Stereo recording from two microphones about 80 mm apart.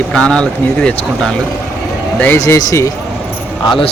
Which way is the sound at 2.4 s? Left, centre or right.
Left.